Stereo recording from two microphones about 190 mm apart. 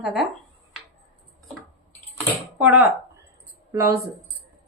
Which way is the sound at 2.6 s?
10° right (ahead or behind).